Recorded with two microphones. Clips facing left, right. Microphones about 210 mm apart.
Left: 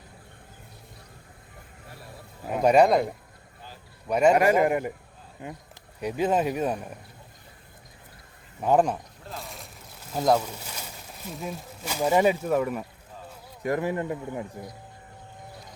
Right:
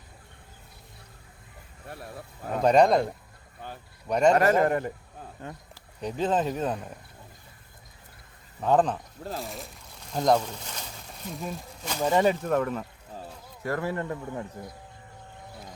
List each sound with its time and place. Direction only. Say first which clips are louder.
2.5 s speech: left 1 dB; 10° left (ahead or behind)
3.6 s a sound: right 6 dB; 60° right (ahead or behind)
4.1 s speech: left 1 dB; 5° left (ahead or behind)
8.6 s speech: left 1 dB; 10° left (ahead or behind)
9.2 s speech: right 6 dB; 40° right (ahead or behind)
10.1 s speech: even; 5° left (ahead or behind)